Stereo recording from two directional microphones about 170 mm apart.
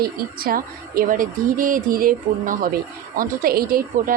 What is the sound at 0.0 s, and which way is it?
A woman's voice, 60° right (ahead or behind).